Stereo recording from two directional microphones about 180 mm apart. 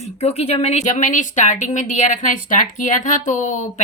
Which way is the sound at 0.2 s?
35° left (ahead or behind).